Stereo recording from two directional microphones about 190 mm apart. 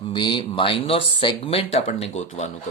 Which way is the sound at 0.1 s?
25° left (ahead or behind).